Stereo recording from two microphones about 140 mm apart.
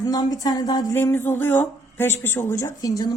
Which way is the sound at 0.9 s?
15° left (ahead or behind).